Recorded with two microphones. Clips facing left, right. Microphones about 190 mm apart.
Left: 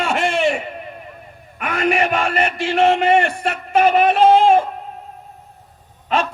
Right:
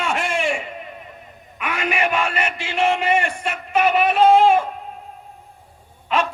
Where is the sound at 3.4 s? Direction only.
45° left (ahead or behind).